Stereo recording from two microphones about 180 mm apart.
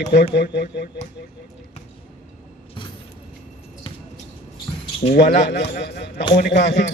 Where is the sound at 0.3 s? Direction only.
70° left (ahead or behind).